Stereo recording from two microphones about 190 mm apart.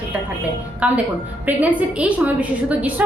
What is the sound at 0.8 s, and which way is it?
A woman's voice, 5° right (ahead or behind).